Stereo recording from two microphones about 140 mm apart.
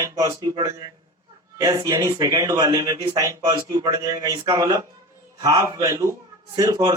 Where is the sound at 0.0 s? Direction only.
20° right (ahead or behind).